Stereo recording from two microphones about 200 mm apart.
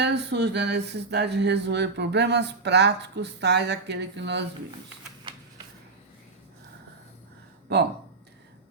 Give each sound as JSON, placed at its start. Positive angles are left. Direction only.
{"t": 0.0, "sound": "music", "side_deg": -55}